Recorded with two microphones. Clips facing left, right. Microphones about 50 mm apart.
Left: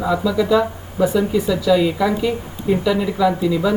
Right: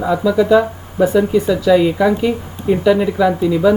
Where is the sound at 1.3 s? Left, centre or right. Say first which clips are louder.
Right 4 dB; right.